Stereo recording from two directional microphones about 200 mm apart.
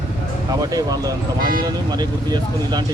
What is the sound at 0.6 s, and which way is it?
Speech, 20° right (ahead or behind).